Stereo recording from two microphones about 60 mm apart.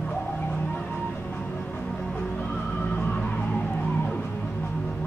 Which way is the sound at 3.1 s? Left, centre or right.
Left.